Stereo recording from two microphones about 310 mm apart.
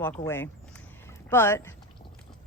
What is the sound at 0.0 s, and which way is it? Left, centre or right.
Speech, centre.